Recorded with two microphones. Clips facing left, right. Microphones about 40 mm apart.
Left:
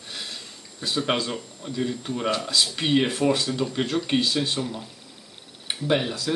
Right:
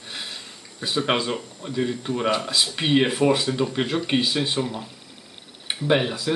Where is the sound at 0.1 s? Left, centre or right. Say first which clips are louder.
Right 1 dB; centre.